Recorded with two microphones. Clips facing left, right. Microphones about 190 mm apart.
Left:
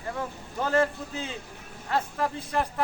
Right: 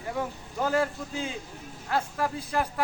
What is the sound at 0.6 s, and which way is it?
A man's voice, 5° right (ahead or behind).